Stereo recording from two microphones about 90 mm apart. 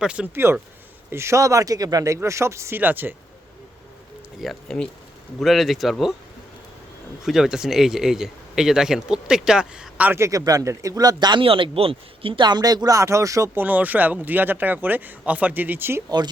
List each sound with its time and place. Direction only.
0.0 s speech: 10° right (ahead or behind)
0.3 s speech: 25° right (ahead or behind)
4.4 s speech: 5° left (ahead or behind)
7.3 s speech: 5° right (ahead or behind)
10.1 s speech: 30° right (ahead or behind); by 11.4 s 55° right (ahead or behind)
11.4 s speech: 85° right
12.5 s speech: 50° right (ahead or behind)
13.6 s speech: 20° right (ahead or behind)
16.0 s speech: 50° right (ahead or behind)